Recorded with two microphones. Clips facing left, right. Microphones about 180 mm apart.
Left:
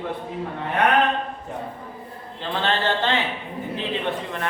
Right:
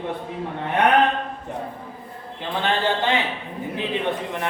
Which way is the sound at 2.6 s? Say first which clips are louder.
Right 1 dB; 15° right (ahead or behind).